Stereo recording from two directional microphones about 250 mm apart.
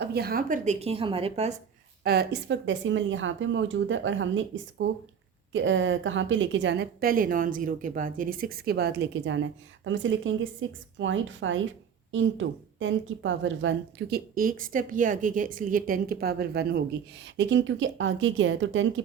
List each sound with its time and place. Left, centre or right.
0.0 s speech: right
2.0 s a woman's voice: right